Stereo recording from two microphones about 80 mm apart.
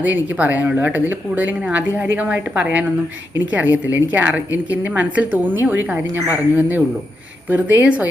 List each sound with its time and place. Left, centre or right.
0.0 s a woman's voice: centre